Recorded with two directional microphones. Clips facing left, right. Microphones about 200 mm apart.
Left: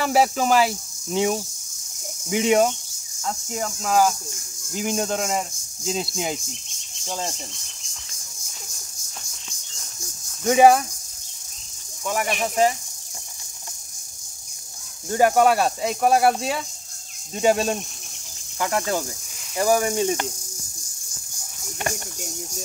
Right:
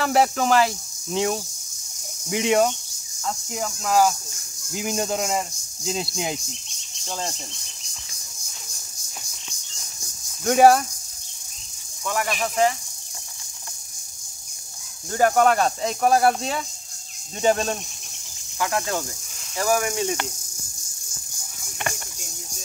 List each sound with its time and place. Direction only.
0.0 s speech: 5° left (ahead or behind)
10.4 s speech: centre (ahead or behind)
12.3 s speech: 20° left (ahead or behind)
15.0 s speech: 10° left (ahead or behind)
19.6 s speech: 30° left (ahead or behind)